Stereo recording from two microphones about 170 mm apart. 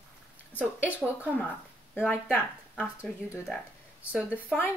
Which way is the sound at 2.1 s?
10° left (ahead or behind).